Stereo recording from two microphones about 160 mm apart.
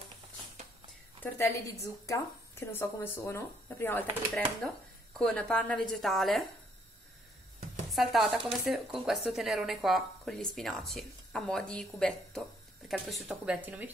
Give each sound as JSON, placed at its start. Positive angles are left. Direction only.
{"t": 1.2, "sound": "a woman's voice", "side_deg": 20}
{"t": 5.2, "sound": "speech", "side_deg": 5}
{"t": 7.9, "sound": "speech", "side_deg": 0}
{"t": 13.6, "sound": "speech", "side_deg": -10}